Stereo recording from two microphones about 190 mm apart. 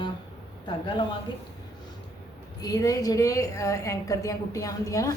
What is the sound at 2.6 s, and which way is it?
A woman's voice, 20° left (ahead or behind).